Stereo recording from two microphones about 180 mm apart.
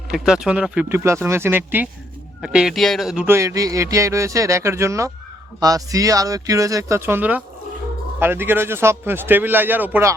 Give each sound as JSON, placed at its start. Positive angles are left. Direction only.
{"t": 0.1, "sound": "speech", "side_deg": -5}